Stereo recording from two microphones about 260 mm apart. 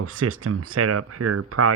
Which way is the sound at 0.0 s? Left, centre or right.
Right.